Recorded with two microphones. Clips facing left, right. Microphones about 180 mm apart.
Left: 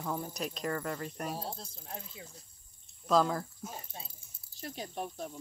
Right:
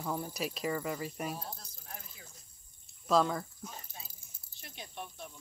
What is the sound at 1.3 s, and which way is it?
Speech, 25° left (ahead or behind).